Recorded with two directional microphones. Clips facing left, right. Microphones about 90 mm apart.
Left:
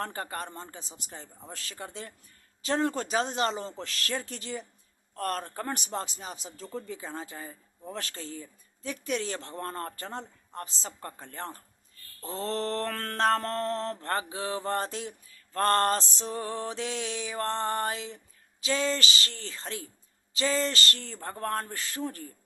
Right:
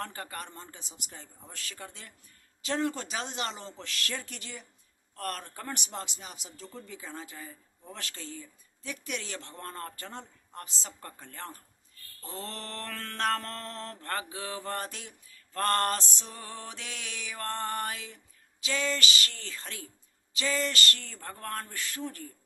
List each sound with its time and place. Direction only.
0.0 s speech: 35° left (ahead or behind)
13.1 s speech: 35° left (ahead or behind)
15.5 s music: 35° left (ahead or behind)
18.6 s speech: 35° left (ahead or behind)